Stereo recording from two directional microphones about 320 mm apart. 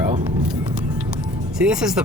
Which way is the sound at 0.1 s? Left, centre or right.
Centre.